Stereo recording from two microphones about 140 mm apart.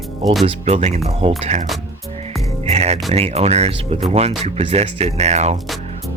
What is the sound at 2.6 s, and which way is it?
Speech, 50° right (ahead or behind).